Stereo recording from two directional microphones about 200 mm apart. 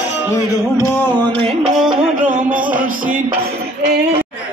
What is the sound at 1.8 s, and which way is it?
Music, 5° right (ahead or behind).